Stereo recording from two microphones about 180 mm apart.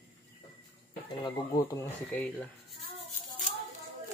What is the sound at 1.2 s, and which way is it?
Speech, 15° left (ahead or behind).